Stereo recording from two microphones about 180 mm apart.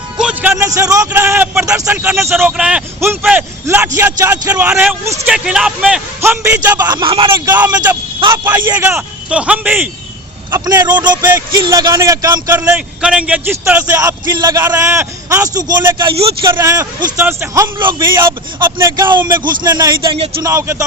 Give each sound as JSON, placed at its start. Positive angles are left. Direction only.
{"t": 0.2, "sound": "speech", "side_deg": -5}
{"t": 7.3, "sound": "speech", "side_deg": -15}
{"t": 10.5, "sound": "speech", "side_deg": -20}
{"t": 11.2, "sound": "speech", "side_deg": -15}
{"t": 16.5, "sound": "speech", "side_deg": -15}
{"t": 19.1, "sound": "speech", "side_deg": -25}
{"t": 20.4, "sound": "speech", "side_deg": -15}